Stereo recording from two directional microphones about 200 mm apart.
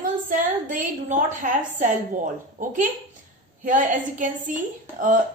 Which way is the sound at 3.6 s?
40° right (ahead or behind).